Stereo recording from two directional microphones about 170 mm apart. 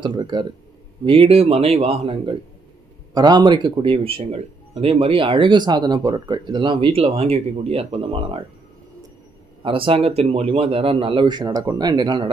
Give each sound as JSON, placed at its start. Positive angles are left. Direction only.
{"t": 0.0, "sound": "speech", "side_deg": -25}
{"t": 3.2, "sound": "speech", "side_deg": -25}
{"t": 9.6, "sound": "speech", "side_deg": -30}